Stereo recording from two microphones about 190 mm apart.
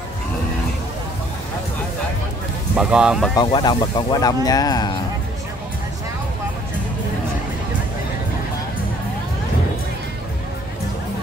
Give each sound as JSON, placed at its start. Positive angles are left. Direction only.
{"t": 2.7, "sound": "speech", "side_deg": -5}
{"t": 3.3, "sound": "speech", "side_deg": 20}